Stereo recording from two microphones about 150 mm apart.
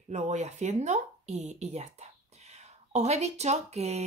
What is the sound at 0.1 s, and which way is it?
Speech, 50° right (ahead or behind).